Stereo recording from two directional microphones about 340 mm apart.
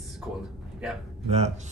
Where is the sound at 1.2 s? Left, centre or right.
Centre.